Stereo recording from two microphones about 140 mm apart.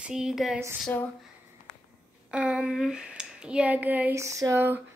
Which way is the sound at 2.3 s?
5° right (ahead or behind).